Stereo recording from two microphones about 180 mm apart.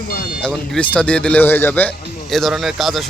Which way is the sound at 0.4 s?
5° left (ahead or behind).